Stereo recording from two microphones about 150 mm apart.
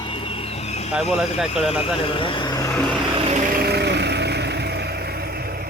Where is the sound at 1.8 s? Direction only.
35° left (ahead or behind).